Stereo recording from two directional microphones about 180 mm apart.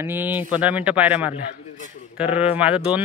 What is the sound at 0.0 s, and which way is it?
A man's voice, 10° right (ahead or behind).